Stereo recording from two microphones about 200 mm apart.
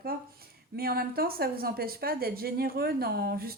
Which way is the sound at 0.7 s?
50° right (ahead or behind).